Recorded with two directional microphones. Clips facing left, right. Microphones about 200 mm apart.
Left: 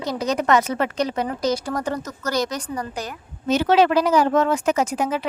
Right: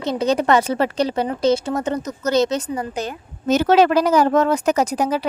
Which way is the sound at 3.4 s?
45° right (ahead or behind).